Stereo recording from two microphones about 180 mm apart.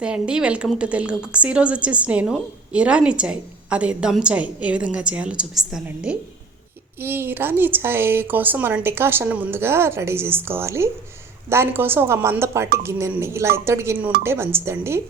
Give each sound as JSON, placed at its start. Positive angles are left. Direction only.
{"t": 0.0, "sound": "a woman's voice", "side_deg": -5}